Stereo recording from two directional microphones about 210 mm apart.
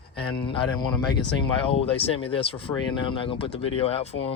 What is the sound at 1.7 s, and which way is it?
Speech, 25° left (ahead or behind).